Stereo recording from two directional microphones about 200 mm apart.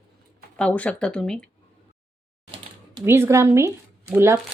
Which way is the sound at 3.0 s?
10° right (ahead or behind).